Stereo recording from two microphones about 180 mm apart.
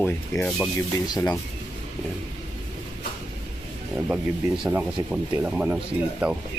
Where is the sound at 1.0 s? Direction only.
20° left (ahead or behind).